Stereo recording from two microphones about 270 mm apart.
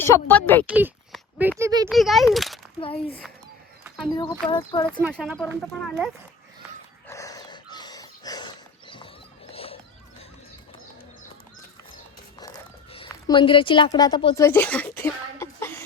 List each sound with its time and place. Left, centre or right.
0.0 s speech: centre
0.7 s speech: centre
3.8 s a sound: centre
4.2 s speech: centre
5.0 s speech: centre
7.1 s dog: centre
9.5 s a sound: left
12.4 s speech: centre